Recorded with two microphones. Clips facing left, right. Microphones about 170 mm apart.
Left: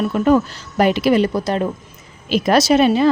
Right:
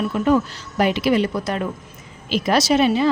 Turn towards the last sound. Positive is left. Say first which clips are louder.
# left 3 dB
turn(degrees=50)  # may be behind; listen again after turning